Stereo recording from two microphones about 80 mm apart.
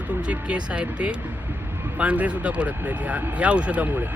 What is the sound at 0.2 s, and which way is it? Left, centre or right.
Speech, centre.